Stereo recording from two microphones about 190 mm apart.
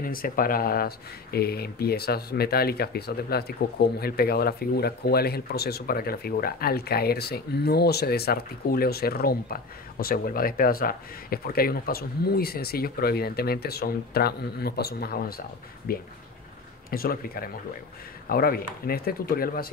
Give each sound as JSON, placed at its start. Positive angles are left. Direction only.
{"t": 0.0, "sound": "speech", "side_deg": 50}